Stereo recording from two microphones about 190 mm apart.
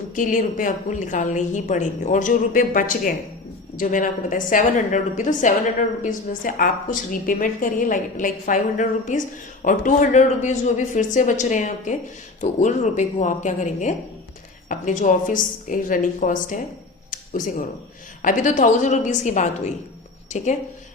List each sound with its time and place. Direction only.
0.2 s a woman's voice: 45° left (ahead or behind)
17.1 s a sound: 45° left (ahead or behind)
18.2 s speech: 45° left (ahead or behind)